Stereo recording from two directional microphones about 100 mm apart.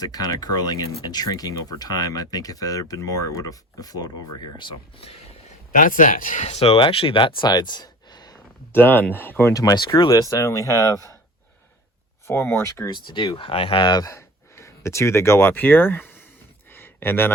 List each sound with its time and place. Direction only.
0.0 s speech: 40° left (ahead or behind)
6.4 s speech: 85° left
6.7 s speech: 60° left (ahead or behind); by 8.4 s 45° left (ahead or behind)
8.7 s speech: 20° left (ahead or behind)
9.5 s speech: 35° left (ahead or behind)
12.3 s speech: 25° left (ahead or behind)
12.9 s speech: 50° left (ahead or behind)
14.1 s speech: 30° left (ahead or behind)
16.7 s a sound: 20° left (ahead or behind)